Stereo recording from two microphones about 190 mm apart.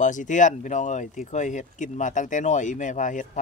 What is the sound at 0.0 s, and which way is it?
Speech, 40° left (ahead or behind).